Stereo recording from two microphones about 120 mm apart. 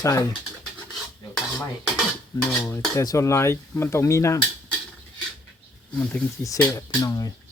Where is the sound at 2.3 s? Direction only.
25° left (ahead or behind).